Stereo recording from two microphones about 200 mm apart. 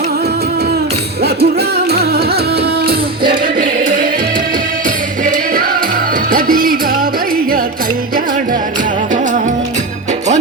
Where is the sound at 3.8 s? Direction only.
40° right (ahead or behind).